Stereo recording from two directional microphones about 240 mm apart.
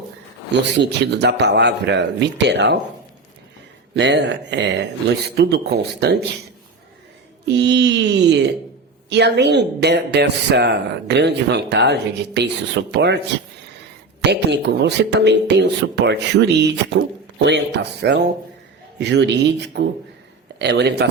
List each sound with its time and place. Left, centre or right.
0.5 s speech: right
3.9 s speech: right
7.4 s speech: right
14.3 s speech: right